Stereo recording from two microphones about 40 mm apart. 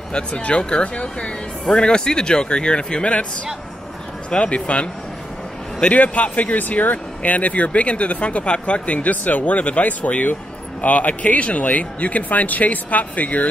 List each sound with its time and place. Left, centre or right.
0.1 s speech: left
4.3 s speech: left
6.1 s speech: left